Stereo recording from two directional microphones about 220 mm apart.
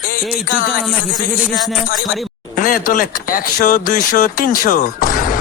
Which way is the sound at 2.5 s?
40° left (ahead or behind).